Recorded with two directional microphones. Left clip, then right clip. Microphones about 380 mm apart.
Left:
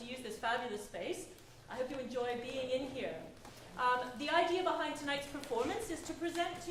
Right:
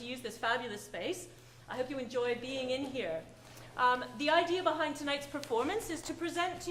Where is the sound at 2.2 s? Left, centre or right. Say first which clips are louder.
Right 4 dB; right.